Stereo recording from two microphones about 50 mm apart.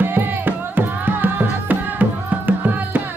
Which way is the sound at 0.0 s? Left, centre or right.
Right.